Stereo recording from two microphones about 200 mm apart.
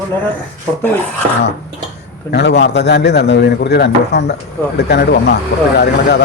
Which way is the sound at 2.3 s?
60° left (ahead or behind).